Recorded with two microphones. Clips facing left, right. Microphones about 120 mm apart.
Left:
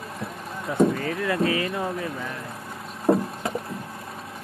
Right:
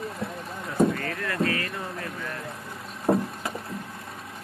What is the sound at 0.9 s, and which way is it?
Speech, 15° left (ahead or behind).